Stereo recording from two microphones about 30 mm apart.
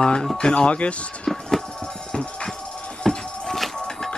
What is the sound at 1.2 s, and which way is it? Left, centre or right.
Music, centre.